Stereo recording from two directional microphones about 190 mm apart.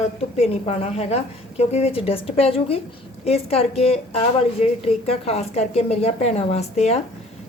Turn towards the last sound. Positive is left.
turn(degrees=35)  # may be behind; listen again after turning